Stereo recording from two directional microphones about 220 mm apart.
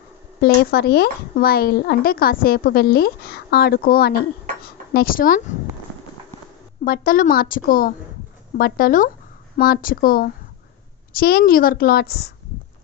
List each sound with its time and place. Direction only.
0.4 s speech: 45° left (ahead or behind)
6.8 s a woman's voice: 40° left (ahead or behind)